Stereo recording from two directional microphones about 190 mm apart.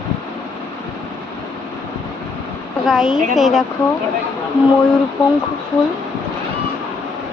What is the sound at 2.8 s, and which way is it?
Speech, centre (ahead or behind).